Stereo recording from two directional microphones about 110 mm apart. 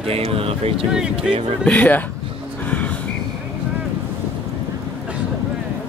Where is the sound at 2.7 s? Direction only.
10° left (ahead or behind).